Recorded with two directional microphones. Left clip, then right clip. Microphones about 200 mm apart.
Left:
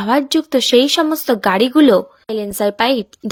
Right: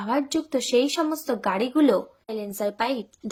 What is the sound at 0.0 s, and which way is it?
Speech, 40° left (ahead or behind).